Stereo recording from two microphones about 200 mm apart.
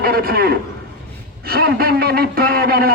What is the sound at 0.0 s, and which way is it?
A man's voice, 50° right (ahead or behind).